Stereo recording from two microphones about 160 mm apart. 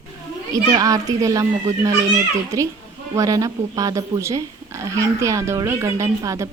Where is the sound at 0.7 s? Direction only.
20° right (ahead or behind).